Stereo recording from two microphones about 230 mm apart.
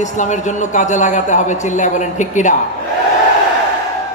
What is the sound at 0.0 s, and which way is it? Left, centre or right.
A man's voice, left.